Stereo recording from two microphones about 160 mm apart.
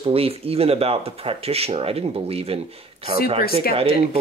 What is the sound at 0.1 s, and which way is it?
Speech, 35° right (ahead or behind).